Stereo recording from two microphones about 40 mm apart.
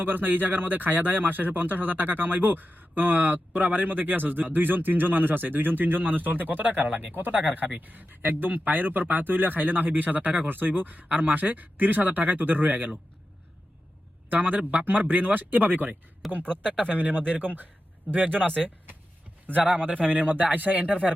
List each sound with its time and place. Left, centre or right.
0.0 s speech: right
10.5 s speech: right
14.3 s speech: right
18.3 s speech: left
19.5 s speech: right